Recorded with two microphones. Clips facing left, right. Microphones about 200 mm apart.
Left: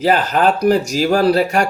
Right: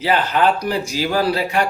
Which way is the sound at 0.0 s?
45° left (ahead or behind).